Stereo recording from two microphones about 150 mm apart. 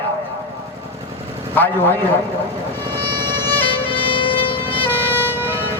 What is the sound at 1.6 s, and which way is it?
Speech, 15° left (ahead or behind).